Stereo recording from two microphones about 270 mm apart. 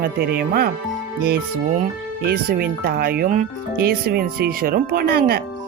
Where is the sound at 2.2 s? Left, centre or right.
Right.